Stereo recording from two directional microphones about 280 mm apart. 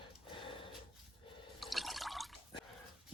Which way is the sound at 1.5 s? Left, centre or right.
Centre.